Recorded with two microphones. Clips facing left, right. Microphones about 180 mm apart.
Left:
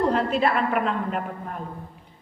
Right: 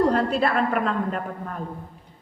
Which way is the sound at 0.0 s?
40° right (ahead or behind).